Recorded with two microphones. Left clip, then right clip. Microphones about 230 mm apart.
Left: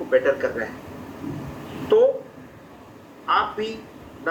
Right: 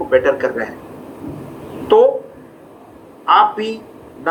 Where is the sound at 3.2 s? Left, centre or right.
Right.